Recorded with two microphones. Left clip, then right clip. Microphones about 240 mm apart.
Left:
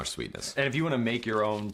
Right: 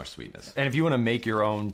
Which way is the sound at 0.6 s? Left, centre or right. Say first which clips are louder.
Right 3 dB; right.